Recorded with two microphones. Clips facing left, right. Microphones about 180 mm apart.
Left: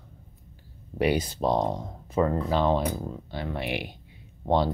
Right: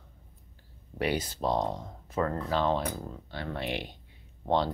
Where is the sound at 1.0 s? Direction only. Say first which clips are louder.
Left 5 dB; 15° left (ahead or behind).